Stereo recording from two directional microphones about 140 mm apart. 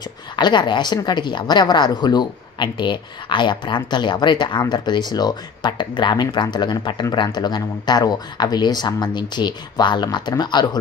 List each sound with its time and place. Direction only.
0.4 s a woman's voice: 35° left (ahead or behind)